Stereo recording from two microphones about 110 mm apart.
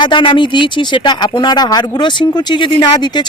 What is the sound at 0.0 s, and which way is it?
Speech, 45° left (ahead or behind).